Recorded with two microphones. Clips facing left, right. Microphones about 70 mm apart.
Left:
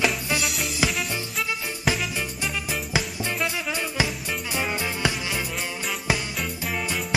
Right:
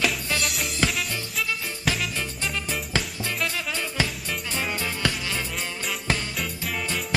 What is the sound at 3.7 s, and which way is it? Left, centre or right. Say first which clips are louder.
Music: left 1 dB; centre.